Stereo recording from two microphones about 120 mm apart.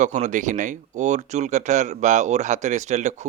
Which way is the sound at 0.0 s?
85° right.